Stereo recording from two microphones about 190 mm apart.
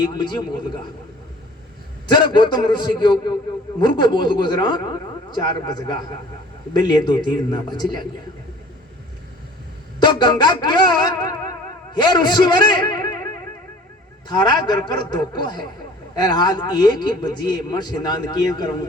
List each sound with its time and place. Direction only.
0.0 s a man's voice: 20° left (ahead or behind)
2.0 s a man's voice: 25° left (ahead or behind)
10.0 s a man's voice: 25° left (ahead or behind)